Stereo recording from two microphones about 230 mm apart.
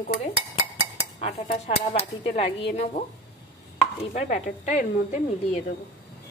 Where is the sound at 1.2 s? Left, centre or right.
Left.